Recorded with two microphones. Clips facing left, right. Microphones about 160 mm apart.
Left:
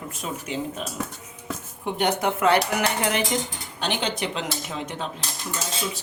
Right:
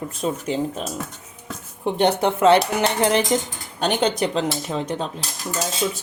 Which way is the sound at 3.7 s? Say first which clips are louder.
Right 7 dB; 40° right (ahead or behind).